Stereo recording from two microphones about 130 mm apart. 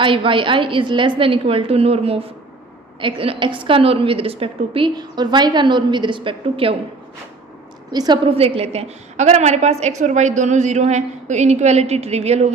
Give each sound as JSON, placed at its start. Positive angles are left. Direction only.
{"t": 0.0, "sound": "a woman's voice", "side_deg": -40}
{"t": 4.9, "sound": "a woman's voice", "side_deg": -35}
{"t": 7.9, "sound": "a woman's voice", "side_deg": -35}